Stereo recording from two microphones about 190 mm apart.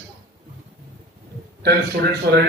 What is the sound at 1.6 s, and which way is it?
Speech, 55° right (ahead or behind).